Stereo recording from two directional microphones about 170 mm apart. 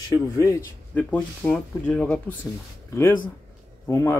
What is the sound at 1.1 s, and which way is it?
Speech, 5° left (ahead or behind).